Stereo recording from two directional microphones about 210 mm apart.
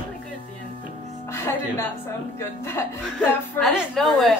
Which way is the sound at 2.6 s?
10° left (ahead or behind).